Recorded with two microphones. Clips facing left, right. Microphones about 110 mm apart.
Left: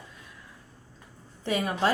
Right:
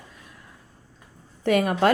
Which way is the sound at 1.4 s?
55° right (ahead or behind).